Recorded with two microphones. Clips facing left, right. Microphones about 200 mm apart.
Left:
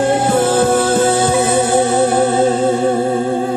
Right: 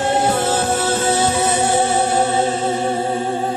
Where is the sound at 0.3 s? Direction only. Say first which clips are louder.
Left 6 dB; 45° left (ahead or behind).